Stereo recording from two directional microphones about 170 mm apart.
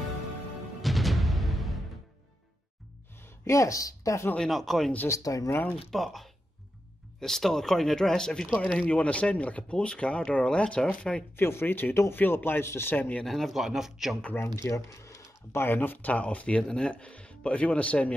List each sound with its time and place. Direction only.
0.8 s music: centre (ahead or behind)
3.2 s speech: 15° left (ahead or behind)
4.4 s speech: centre (ahead or behind)
5.0 s speech: 20° left (ahead or behind)
5.9 s speech: centre (ahead or behind)
14.3 s speech: 15° left (ahead or behind)